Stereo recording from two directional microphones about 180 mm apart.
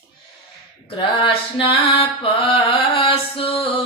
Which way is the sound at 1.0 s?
25° left (ahead or behind).